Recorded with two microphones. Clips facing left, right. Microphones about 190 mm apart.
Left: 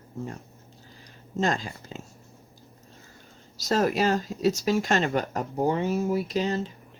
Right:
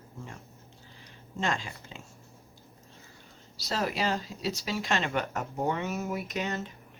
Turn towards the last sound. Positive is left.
turn(degrees=30)  # may be behind; listen again after turning